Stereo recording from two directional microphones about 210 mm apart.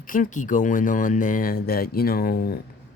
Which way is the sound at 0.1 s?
40° left (ahead or behind).